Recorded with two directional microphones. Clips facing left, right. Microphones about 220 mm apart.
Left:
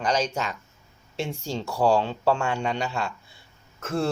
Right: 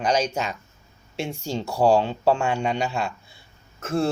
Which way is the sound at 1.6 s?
25° right (ahead or behind).